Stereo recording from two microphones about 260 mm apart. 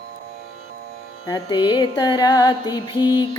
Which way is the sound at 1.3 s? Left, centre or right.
Centre.